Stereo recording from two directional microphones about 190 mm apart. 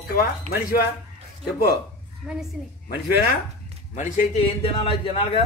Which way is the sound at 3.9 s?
40° left (ahead or behind).